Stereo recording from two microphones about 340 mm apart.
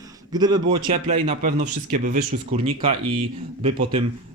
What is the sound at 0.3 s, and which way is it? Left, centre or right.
A man's voice, centre.